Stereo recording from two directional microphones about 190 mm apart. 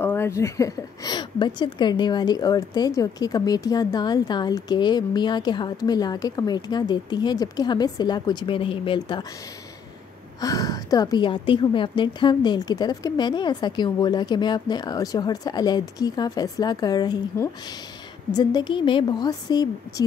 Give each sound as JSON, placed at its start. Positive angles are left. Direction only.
{"t": 0.0, "sound": "speech", "side_deg": 10}
{"t": 10.4, "sound": "speech", "side_deg": 20}